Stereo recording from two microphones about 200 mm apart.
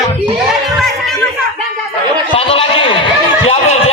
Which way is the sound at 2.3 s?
25° left (ahead or behind).